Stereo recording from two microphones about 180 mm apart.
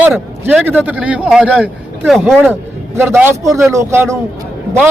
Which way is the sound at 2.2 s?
15° right (ahead or behind).